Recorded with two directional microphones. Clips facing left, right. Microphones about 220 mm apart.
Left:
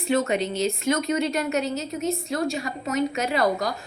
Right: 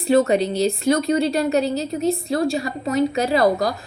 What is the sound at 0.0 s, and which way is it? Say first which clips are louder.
A woman's voice: right 6 dB; 35° right (ahead or behind).